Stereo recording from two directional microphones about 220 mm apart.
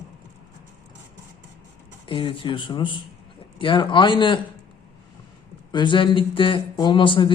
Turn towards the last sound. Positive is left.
turn(degrees=20)  # may be behind; listen again after turning